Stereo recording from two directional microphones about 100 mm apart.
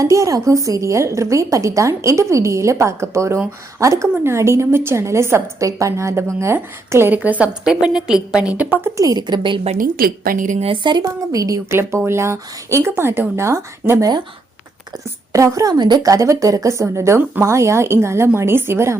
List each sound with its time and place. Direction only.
0.0 s a woman's voice: 35° right (ahead or behind); by 8.9 s 15° right (ahead or behind)
9.0 s a woman's voice: 40° right (ahead or behind)
10.8 s a woman's voice: 50° right (ahead or behind)
11.3 s a woman's voice: 35° right (ahead or behind)
15.3 s a woman's voice: 30° right (ahead or behind)